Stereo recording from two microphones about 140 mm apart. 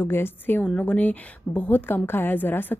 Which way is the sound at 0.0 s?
15° left (ahead or behind).